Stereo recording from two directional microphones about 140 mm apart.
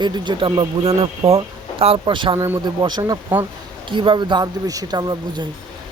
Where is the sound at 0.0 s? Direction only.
30° right (ahead or behind).